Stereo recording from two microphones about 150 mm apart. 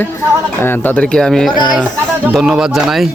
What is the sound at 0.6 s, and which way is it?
Speech, 15° left (ahead or behind).